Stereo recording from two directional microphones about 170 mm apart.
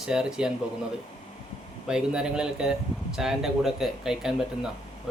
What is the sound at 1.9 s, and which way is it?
A man's voice, 5° right (ahead or behind).